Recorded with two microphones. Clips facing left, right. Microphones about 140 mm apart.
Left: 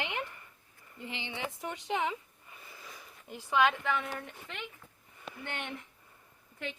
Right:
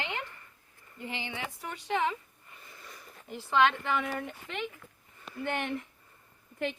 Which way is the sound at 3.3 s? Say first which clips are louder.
Right 2 dB; 10° left (ahead or behind).